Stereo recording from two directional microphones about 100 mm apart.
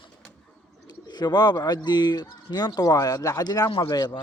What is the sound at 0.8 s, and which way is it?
Speech, 45° left (ahead or behind).